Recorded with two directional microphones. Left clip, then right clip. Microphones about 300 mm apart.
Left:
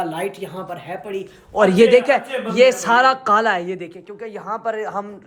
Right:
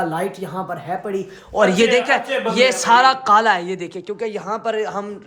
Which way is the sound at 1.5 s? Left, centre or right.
Centre.